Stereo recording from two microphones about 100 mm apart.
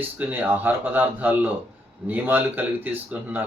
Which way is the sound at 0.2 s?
15° right (ahead or behind).